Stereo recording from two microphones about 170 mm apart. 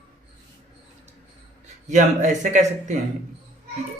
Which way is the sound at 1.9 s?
45° right (ahead or behind).